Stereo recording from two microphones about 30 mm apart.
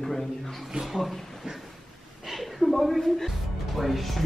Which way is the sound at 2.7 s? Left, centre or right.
Centre.